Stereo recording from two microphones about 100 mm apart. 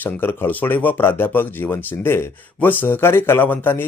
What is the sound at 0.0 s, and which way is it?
Speech, 20° left (ahead or behind).